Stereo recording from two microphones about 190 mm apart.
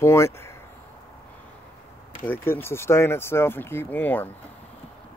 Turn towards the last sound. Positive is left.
turn(degrees=10)  # may be behind; listen again after turning